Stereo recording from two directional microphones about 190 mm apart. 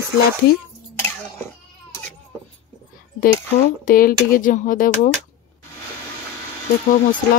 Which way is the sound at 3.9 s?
50° left (ahead or behind).